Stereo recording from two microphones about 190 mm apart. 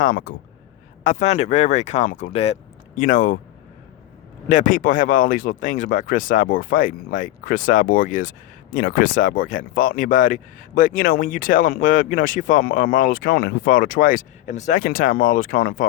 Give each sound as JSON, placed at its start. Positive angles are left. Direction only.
{"t": 0.0, "sound": "speech", "side_deg": 45}
{"t": 4.4, "sound": "speech", "side_deg": 40}